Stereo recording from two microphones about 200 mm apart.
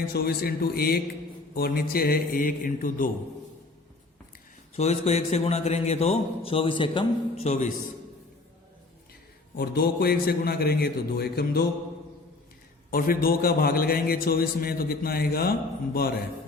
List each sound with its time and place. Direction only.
0.1 s a man's voice: 50° left (ahead or behind)
4.8 s a man's voice: 35° left (ahead or behind)
9.6 s a man's voice: 50° left (ahead or behind)
12.9 s a man's voice: 45° left (ahead or behind)